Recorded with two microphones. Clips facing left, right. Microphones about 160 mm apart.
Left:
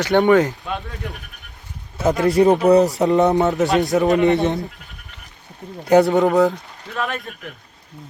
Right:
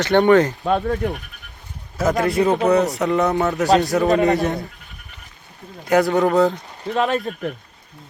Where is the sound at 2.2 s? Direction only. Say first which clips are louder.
Left 5 dB; 35° left (ahead or behind).